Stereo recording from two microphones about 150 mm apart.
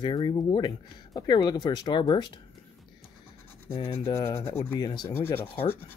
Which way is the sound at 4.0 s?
20° left (ahead or behind).